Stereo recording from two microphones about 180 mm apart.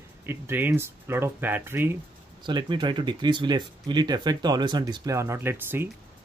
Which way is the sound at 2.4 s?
25° right (ahead or behind).